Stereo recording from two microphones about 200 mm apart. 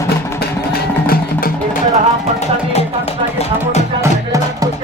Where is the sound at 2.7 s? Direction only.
30° left (ahead or behind).